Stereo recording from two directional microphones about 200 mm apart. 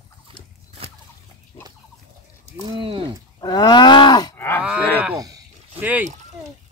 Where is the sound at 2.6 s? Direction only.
25° right (ahead or behind).